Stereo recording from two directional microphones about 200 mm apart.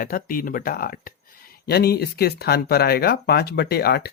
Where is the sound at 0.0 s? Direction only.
45° left (ahead or behind).